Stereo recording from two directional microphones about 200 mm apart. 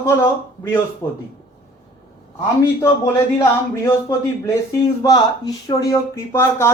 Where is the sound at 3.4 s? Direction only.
15° left (ahead or behind).